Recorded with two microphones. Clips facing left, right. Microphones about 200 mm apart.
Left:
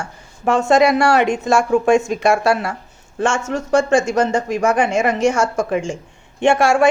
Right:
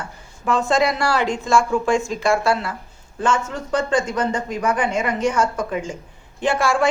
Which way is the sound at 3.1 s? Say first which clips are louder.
Left 3 dB; 80° left.